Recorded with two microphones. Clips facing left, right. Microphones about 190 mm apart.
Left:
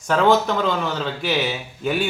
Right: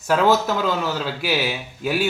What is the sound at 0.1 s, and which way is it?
A man's voice, 5° right (ahead or behind).